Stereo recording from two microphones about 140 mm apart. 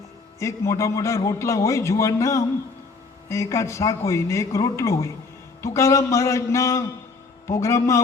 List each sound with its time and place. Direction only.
0.3 s a man's voice: 20° left (ahead or behind)